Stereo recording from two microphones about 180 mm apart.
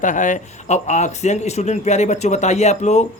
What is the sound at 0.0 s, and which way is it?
Speech, 45° left (ahead or behind).